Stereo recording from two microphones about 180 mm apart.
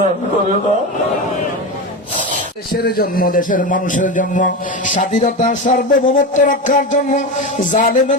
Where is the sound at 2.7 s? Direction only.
55° left (ahead or behind).